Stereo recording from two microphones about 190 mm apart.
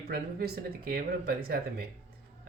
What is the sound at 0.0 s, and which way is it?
Speech, 55° right (ahead or behind).